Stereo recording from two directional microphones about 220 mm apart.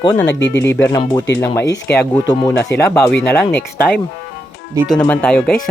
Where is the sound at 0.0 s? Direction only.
20° left (ahead or behind).